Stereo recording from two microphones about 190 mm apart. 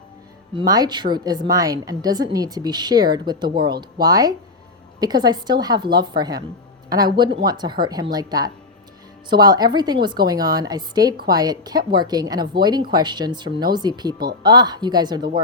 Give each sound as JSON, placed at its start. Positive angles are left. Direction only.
{"t": 0.5, "sound": "a woman's voice", "side_deg": -20}